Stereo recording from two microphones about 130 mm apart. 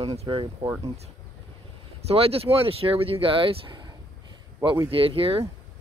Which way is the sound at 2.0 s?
50° right (ahead or behind).